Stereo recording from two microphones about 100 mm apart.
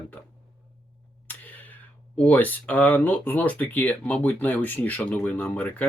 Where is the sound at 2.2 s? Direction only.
15° left (ahead or behind).